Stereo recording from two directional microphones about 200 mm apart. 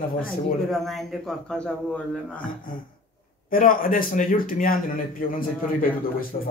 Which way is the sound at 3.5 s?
45° left (ahead or behind).